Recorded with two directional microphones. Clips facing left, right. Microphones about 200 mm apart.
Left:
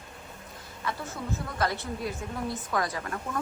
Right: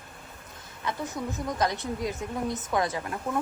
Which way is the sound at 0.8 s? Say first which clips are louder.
Right 3 dB; 15° right (ahead or behind).